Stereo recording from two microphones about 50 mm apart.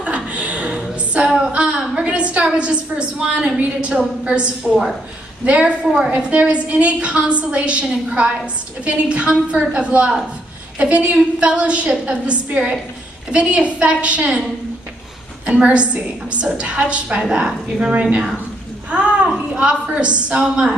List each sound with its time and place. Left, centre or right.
0.0 s a sound: right
2.5 s a woman's voice: right
6.3 s a woman's voice: right
15.4 s a woman's voice: right